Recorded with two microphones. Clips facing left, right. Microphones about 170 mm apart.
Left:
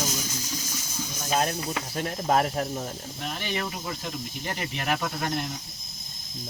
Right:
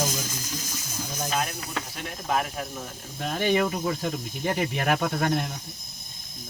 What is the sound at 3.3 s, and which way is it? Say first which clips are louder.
Speech: right 10 dB; 50° right (ahead or behind).